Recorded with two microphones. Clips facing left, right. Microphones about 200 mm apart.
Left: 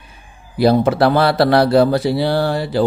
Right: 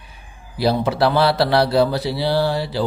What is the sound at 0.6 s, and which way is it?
Speech, 50° left (ahead or behind).